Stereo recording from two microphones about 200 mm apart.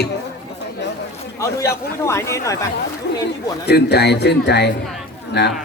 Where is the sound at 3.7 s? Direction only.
55° left (ahead or behind).